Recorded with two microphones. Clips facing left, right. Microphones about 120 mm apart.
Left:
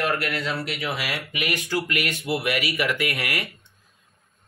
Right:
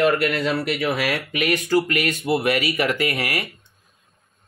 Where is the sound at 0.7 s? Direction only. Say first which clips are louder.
Right 7 dB; 50° right (ahead or behind); by 3.5 s 35° right (ahead or behind).